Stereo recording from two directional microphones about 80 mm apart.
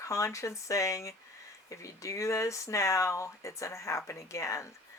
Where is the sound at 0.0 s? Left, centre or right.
Left.